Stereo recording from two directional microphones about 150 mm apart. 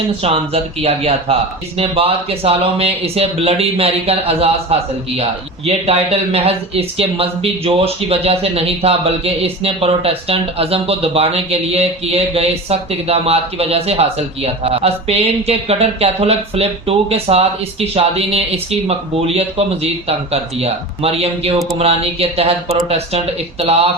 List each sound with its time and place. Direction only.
0.2 s speech: 40° right (ahead or behind)